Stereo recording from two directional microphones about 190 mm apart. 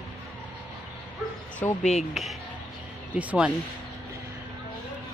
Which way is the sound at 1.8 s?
35° left (ahead or behind).